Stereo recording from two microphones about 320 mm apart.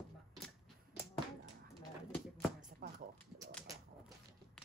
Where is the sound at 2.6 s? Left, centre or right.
Right.